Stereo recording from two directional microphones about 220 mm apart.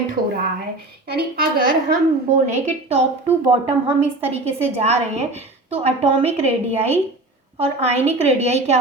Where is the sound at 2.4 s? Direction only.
30° right (ahead or behind).